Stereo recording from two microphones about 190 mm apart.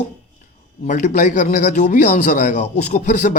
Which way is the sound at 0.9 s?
40° left (ahead or behind).